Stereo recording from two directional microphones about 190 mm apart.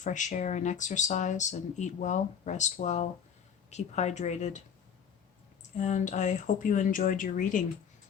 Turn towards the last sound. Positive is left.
turn(degrees=45)  # may be behind; listen again after turning